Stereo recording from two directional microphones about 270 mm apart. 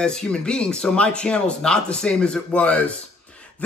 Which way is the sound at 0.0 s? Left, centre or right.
Centre.